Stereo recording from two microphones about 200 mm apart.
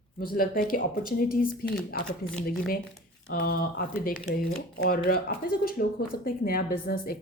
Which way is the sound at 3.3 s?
50° left (ahead or behind).